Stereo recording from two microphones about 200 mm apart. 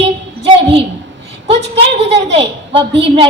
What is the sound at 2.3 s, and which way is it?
Speech, 25° right (ahead or behind).